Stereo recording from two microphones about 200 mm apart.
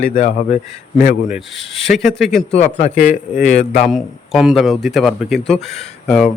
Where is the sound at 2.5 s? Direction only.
35° left (ahead or behind).